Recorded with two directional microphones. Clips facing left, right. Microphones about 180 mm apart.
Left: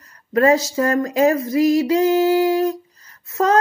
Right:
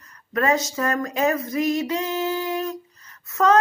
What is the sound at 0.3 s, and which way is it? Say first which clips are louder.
Speech: left 7 dB; 30° left (ahead or behind).